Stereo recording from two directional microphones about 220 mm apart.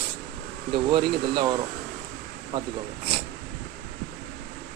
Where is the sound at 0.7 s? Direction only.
20° right (ahead or behind).